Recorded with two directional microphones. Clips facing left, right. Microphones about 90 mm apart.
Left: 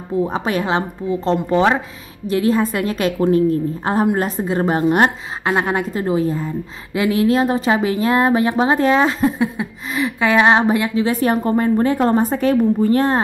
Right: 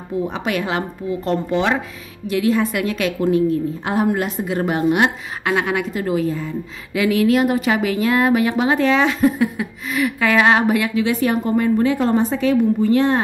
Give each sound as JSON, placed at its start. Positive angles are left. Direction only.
{"t": 0.3, "sound": "a woman's voice", "side_deg": 35}